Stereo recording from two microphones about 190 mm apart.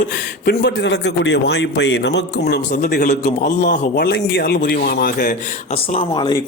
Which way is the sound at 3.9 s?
65° left (ahead or behind).